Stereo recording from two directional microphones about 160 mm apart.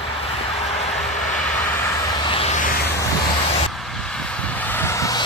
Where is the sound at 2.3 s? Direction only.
40° left (ahead or behind).